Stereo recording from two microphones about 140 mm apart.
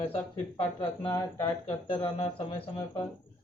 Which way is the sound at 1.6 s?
45° left (ahead or behind).